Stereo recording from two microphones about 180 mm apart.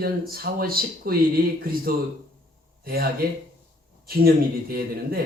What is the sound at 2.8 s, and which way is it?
Speech, 55° right (ahead or behind).